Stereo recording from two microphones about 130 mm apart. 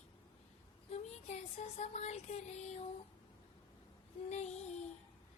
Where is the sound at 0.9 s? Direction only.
60° left (ahead or behind).